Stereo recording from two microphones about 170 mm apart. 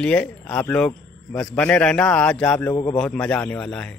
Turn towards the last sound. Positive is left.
turn(degrees=5)  # may be behind; listen again after turning